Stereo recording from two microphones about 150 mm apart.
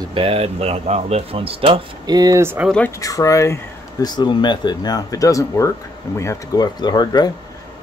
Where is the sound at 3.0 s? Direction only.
20° left (ahead or behind).